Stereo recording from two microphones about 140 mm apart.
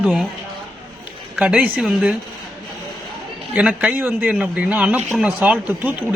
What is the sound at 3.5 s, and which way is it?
A man's voice, 10° right (ahead or behind).